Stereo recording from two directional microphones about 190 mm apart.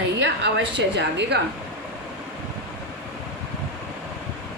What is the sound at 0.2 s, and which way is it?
A woman's voice, 65° right (ahead or behind).